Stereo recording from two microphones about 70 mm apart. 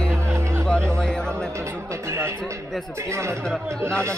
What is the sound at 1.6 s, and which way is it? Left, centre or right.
Speech, right.